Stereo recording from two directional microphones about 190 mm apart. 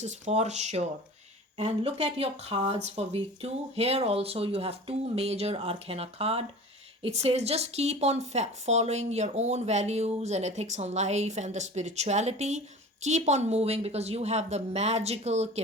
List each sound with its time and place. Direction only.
0.0 s speech: 35° right (ahead or behind)